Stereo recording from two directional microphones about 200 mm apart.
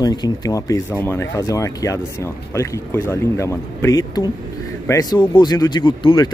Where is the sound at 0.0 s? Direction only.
20° left (ahead or behind).